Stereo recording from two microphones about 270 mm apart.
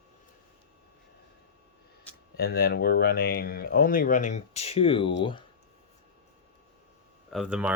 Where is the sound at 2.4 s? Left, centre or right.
Left; by 5.1 s centre.